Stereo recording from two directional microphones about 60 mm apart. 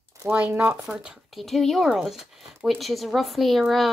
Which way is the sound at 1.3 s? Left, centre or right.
Centre.